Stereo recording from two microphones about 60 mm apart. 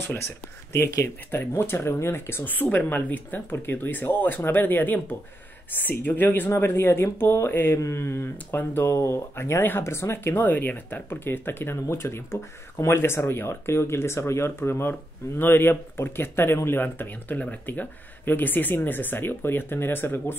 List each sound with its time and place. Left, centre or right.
0.0 s speech: left
2.5 s a woman's voice: left
7.8 s speech: left
8.9 s speech: left